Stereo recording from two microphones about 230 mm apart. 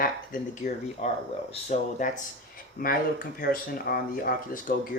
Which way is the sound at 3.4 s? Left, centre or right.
Left.